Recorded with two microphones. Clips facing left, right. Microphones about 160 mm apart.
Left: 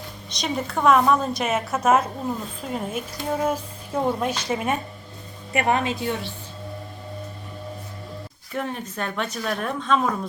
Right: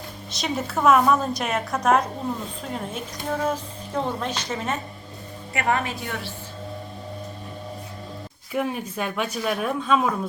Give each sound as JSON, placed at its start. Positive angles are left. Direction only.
{"t": 0.3, "sound": "a woman's voice", "side_deg": -5}
{"t": 8.5, "sound": "speech", "side_deg": -10}